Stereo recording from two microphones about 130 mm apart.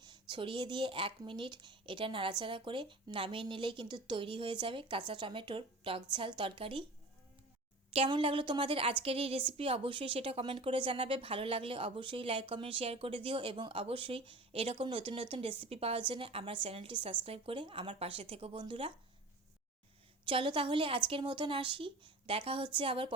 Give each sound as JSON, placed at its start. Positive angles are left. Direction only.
{"t": 0.0, "sound": "speech", "side_deg": -35}
{"t": 7.9, "sound": "a woman's voice", "side_deg": -45}
{"t": 20.2, "sound": "speech", "side_deg": -40}